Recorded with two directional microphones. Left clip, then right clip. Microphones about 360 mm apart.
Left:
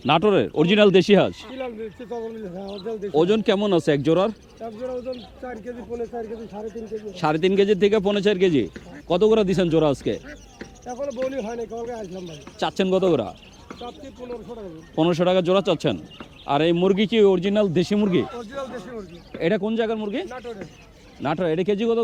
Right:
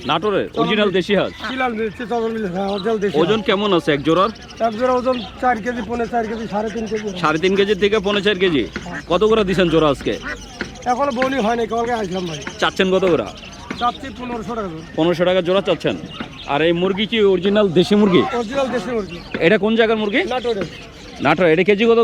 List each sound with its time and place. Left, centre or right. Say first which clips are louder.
0.1 s speech: even; left
1.5 s speech: right 11 dB; centre
3.2 s speech: left 1 dB; left
4.6 s speech: right 13 dB; right
7.2 s a man's voice: right 3 dB; left
11.0 s speech: right 6 dB; centre
12.0 s speech: right 11 dB; centre
12.5 s speech: right 5 dB; left
13.7 s a sound: right 16 dB; right
14.9 s a man's voice: right 3 dB; left; by 20.2 s centre
20.2 s speech: right 14 dB; centre
21.2 s a man's voice: right 9 dB; centre